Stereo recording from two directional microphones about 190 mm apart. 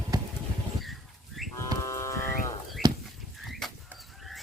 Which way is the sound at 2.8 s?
25° right (ahead or behind).